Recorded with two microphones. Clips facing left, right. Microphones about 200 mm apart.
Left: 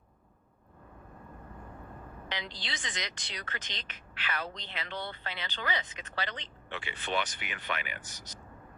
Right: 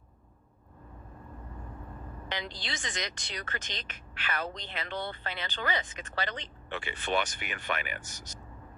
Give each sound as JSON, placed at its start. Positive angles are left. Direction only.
{"t": 2.3, "sound": "speech", "side_deg": -50}